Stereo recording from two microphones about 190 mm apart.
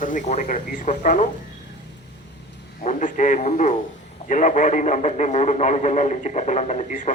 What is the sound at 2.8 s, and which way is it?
A man's voice, 40° left (ahead or behind).